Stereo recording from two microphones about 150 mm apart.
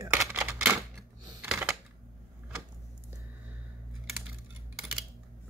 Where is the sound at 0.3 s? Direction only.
15° right (ahead or behind).